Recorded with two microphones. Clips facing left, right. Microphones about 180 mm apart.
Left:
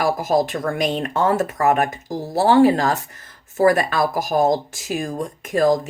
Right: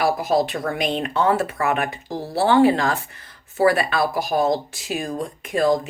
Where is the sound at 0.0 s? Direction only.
45° left (ahead or behind).